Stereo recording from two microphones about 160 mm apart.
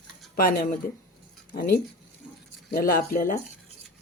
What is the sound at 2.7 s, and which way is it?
Speech, 70° left (ahead or behind).